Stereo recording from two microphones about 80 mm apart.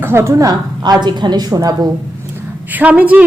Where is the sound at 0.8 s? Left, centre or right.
Right.